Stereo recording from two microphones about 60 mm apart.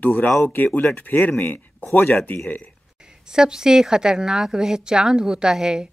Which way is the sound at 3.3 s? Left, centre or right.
Centre.